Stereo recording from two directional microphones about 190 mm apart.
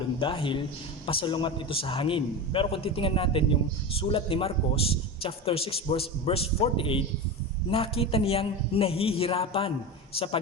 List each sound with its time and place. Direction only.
0.2 s a man's voice: 25° left (ahead or behind)